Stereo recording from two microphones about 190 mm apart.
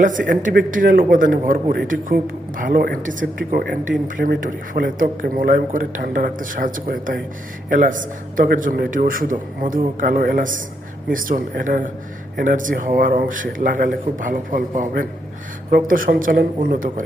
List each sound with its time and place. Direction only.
0.0 s speech: 45° right (ahead or behind)